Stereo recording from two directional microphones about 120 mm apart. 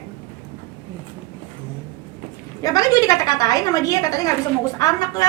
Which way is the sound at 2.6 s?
30° left (ahead or behind).